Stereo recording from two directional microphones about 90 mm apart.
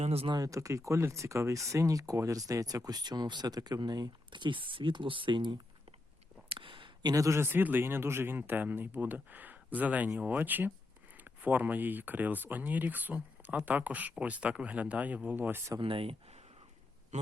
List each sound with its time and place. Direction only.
0.1 s speech: 90° right
0.3 s speech: 40° right (ahead or behind); by 5.5 s 60° right (ahead or behind)
6.5 s a sound: 70° right (ahead or behind)
7.1 s speech: 35° right (ahead or behind)
15.8 s speech: 85° right